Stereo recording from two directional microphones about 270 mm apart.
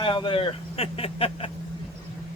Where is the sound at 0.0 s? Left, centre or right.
Centre.